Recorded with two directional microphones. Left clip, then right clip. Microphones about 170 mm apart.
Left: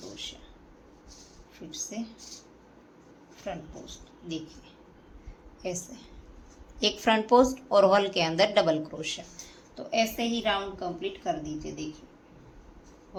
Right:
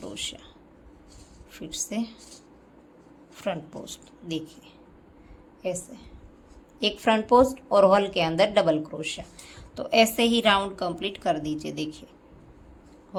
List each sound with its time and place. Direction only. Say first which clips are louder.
0.1 s a sound: right 6 dB; 40° right (ahead or behind)
1.5 s speech: right 6 dB; 40° right (ahead or behind)
3.4 s speech: right 7 dB; 40° right (ahead or behind)
5.6 s speech: right 4 dB; 10° right (ahead or behind)
9.7 s a woman's voice: right 7 dB; 40° right (ahead or behind)